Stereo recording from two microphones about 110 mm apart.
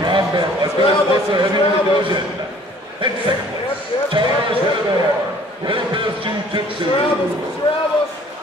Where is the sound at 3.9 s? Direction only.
55° left (ahead or behind).